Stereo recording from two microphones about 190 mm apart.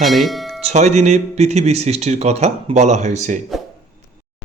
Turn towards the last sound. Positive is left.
turn(degrees=-40)  # may be behind; listen again after turning